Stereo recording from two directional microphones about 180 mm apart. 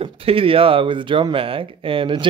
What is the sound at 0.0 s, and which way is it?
Speech, 30° right (ahead or behind).